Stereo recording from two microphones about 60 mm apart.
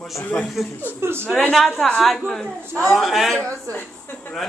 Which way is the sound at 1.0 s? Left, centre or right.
Right.